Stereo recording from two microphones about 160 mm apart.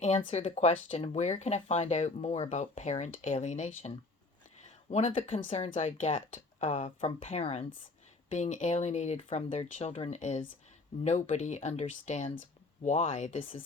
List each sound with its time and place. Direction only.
0.0 s speech: 40° left (ahead or behind)